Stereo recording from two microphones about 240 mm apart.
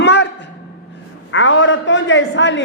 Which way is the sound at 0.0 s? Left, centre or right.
Left.